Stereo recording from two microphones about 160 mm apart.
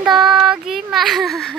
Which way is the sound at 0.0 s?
5° right (ahead or behind).